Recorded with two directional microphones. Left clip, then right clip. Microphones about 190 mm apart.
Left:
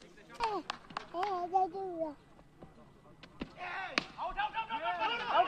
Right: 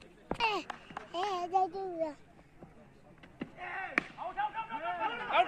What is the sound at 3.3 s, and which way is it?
Power windows, 15° left (ahead or behind).